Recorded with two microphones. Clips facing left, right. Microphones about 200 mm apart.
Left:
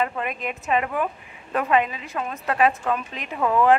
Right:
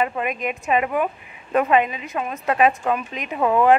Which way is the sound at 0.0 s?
15° right (ahead or behind).